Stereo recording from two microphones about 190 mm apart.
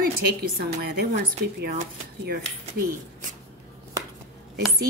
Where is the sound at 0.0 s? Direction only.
50° right (ahead or behind).